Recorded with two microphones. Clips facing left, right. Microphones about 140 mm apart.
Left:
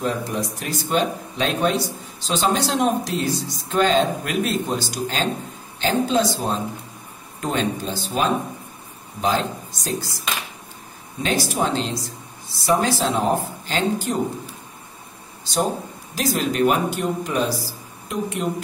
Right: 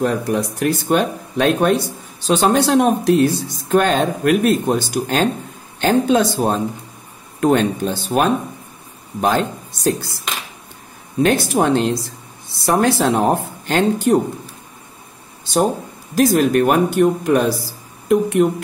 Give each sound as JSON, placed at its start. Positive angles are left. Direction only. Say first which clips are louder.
{"t": 0.0, "sound": "speech", "louder": "right 6 dB", "side_deg": -60}
{"t": 11.2, "sound": "speech", "louder": "right 6 dB", "side_deg": -55}
{"t": 16.2, "sound": "a woman's voice", "louder": "right 7 dB", "side_deg": -50}